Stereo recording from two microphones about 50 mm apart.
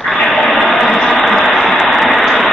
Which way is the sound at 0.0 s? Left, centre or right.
Centre.